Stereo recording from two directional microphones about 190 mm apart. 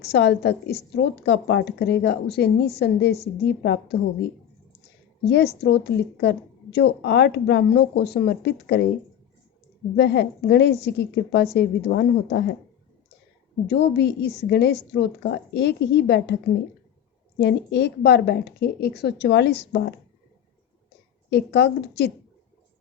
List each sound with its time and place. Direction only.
0.0 s a woman's voice: 65° left (ahead or behind)
5.2 s a woman's voice: 60° left (ahead or behind)
9.9 s a woman's voice: 65° left (ahead or behind)
13.7 s a woman's voice: 60° left (ahead or behind)
21.2 s a woman's voice: 65° left (ahead or behind)